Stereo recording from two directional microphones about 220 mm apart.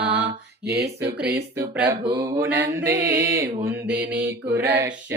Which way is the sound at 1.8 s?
20° right (ahead or behind).